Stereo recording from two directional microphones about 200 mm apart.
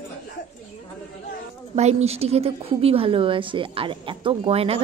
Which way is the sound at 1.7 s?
30° right (ahead or behind).